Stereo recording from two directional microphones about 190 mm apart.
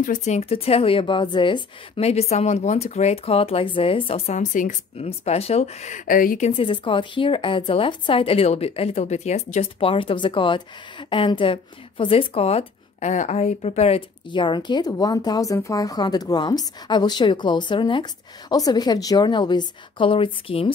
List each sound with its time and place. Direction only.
0.0 s a woman's voice: 40° left (ahead or behind)
6.5 s a woman's voice: 25° left (ahead or behind)